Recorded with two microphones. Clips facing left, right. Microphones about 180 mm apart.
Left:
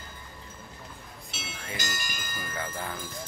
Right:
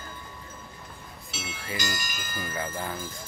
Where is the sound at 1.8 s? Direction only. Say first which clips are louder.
Right 4 dB; 50° left (ahead or behind).